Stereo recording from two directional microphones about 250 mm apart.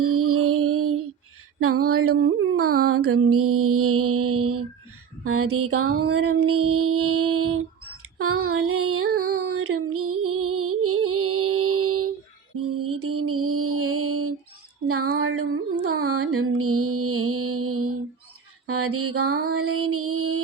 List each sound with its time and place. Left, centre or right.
0.0 s music: right
1.6 s mantra: right
8.2 s music: right
14.8 s mantra: right